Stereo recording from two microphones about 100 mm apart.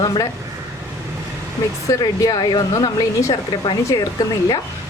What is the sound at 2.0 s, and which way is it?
Speech, 40° left (ahead or behind).